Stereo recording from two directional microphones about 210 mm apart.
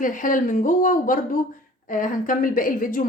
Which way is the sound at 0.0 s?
40° left (ahead or behind).